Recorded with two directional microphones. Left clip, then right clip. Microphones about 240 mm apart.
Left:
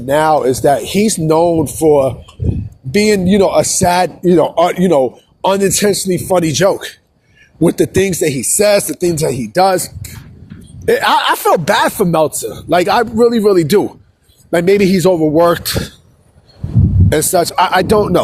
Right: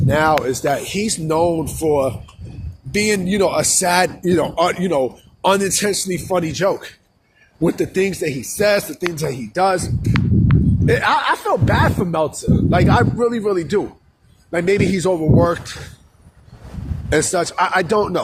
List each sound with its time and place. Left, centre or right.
0.1 s a woman's voice: left
17.1 s a woman's voice: left